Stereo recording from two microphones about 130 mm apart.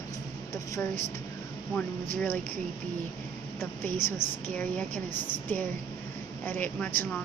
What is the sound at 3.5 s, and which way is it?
A woman's voice, 15° left (ahead or behind).